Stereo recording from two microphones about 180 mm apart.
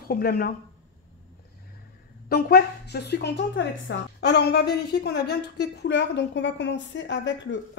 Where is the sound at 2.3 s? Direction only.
60° left (ahead or behind).